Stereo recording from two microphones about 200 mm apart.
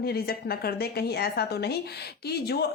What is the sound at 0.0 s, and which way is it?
A woman's voice, 50° left (ahead or behind).